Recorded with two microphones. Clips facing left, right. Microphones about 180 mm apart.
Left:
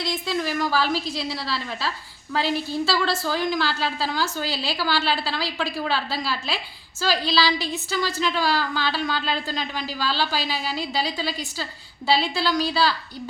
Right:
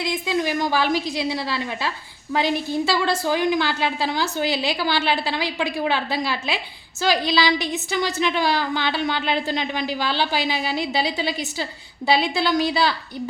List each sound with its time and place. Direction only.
0.1 s a woman's voice: 15° right (ahead or behind)